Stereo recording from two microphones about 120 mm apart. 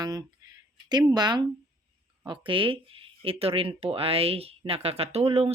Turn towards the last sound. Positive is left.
turn(degrees=-55)  # may be behind; listen again after turning